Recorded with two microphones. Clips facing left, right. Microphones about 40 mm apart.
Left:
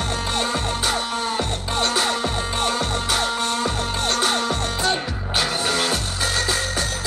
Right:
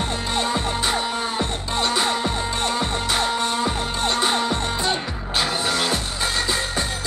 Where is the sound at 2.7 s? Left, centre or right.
Centre.